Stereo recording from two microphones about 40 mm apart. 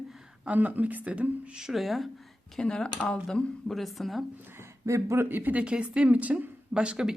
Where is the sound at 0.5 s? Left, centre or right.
Right.